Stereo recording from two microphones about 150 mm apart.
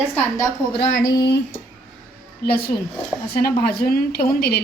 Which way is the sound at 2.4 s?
90° left.